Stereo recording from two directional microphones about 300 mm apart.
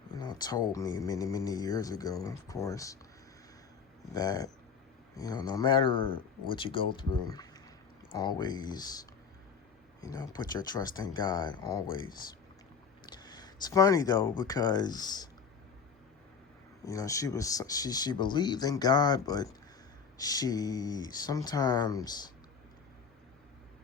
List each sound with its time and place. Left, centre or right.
0.1 s speech: centre
4.1 s speech: centre
13.2 s speech: centre
16.8 s speech: centre